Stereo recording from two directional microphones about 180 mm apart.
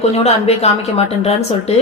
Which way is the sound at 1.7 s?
35° left (ahead or behind).